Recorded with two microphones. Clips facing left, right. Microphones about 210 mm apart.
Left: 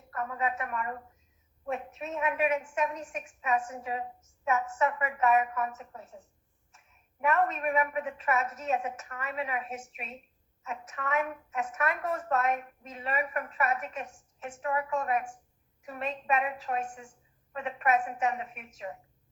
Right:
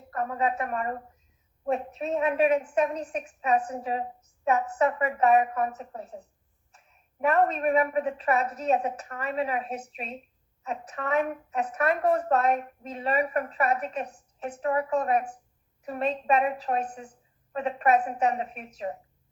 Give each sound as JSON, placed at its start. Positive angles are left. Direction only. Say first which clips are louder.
{"t": 0.1, "sound": "a woman's voice", "louder": "right 5 dB", "side_deg": -35}